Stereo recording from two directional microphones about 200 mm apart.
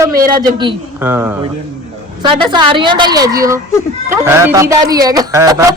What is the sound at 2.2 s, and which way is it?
A woman's voice, 20° right (ahead or behind).